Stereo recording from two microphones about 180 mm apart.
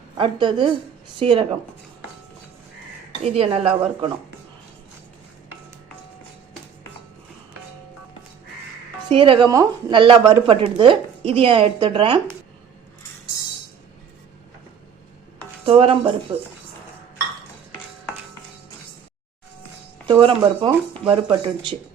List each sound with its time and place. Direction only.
0.2 s speech: 25° right (ahead or behind)
3.3 s speech: 30° right (ahead or behind)
9.0 s speech: 30° right (ahead or behind)
15.6 s speech: 30° right (ahead or behind)
20.1 s speech: 30° right (ahead or behind)